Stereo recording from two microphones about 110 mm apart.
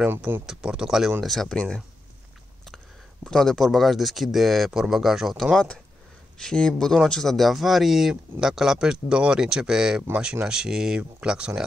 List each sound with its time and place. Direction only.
0.0 s speech: 15° right (ahead or behind)
0.5 s speech: 5° right (ahead or behind)
3.3 s speech: 5° left (ahead or behind)